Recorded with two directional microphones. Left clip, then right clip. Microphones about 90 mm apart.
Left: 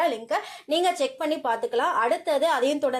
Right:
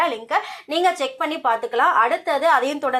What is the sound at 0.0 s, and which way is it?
Speech, 25° left (ahead or behind).